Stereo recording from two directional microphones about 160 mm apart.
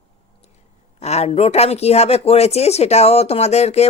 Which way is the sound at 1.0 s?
45° left (ahead or behind).